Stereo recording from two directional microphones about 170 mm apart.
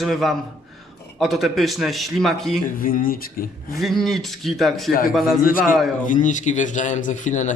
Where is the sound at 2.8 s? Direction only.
55° left (ahead or behind).